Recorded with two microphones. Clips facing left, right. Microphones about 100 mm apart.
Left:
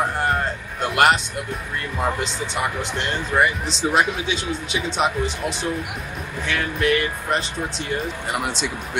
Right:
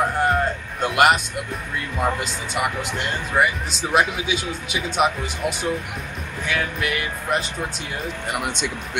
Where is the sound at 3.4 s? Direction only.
5° right (ahead or behind).